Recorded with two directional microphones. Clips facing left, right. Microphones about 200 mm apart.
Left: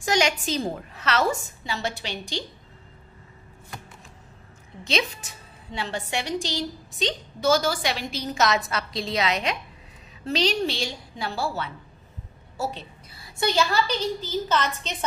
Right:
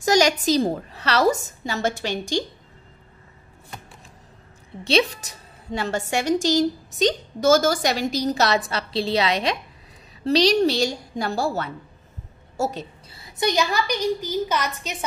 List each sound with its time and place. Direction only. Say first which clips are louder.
0.0 s a woman's voice: right 5 dB; 40° right (ahead or behind)
4.8 s a woman's voice: right 6 dB; 35° right (ahead or behind)
13.1 s a woman's voice: right 2 dB; 20° right (ahead or behind)